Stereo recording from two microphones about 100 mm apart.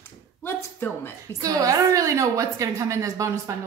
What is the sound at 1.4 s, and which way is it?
A woman's voice, 35° right (ahead or behind).